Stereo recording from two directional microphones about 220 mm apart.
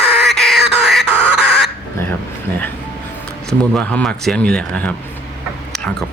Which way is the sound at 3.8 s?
5° left (ahead or behind).